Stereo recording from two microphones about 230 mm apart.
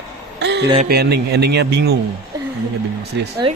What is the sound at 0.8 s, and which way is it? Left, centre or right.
A woman's voice, right.